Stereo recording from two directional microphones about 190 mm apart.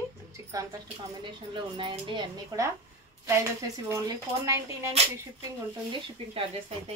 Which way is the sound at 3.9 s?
15° right (ahead or behind).